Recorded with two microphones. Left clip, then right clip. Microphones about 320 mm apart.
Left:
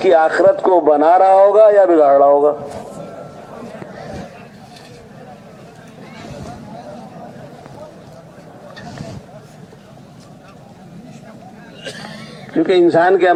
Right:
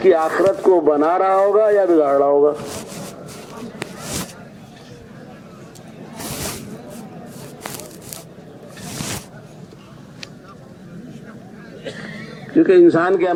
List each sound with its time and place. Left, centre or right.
0.0 s speech: left
12.6 s speech: left